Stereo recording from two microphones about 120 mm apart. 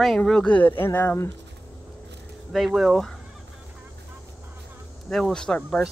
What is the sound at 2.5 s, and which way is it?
Speech, centre (ahead or behind).